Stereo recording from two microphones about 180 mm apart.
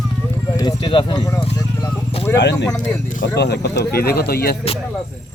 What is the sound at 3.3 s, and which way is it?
Speech, 65° left (ahead or behind).